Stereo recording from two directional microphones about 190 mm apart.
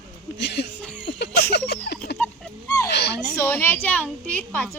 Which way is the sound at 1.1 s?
65° left (ahead or behind).